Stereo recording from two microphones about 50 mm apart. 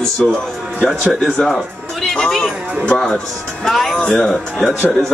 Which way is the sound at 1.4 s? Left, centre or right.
Centre.